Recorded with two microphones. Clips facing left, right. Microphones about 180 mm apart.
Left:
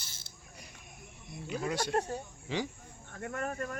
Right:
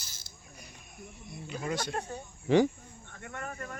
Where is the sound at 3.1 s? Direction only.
40° left (ahead or behind).